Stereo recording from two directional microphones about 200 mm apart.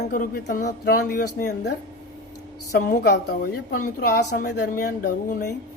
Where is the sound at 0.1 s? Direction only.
45° left (ahead or behind).